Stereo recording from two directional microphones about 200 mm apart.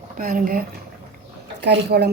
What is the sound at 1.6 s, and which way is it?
Speech, 55° right (ahead or behind).